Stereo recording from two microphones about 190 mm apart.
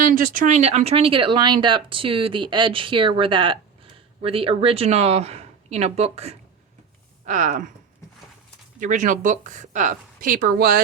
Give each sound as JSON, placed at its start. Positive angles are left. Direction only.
{"t": 0.0, "sound": "speech", "side_deg": -45}
{"t": 8.8, "sound": "speech", "side_deg": -40}